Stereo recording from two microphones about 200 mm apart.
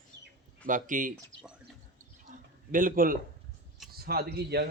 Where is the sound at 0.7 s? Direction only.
40° right (ahead or behind).